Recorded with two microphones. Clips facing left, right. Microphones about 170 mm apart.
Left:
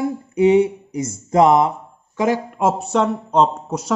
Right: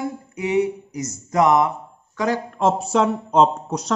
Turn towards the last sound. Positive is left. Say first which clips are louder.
# left 1 dB
turn(degrees=5)  # may be behind; listen again after turning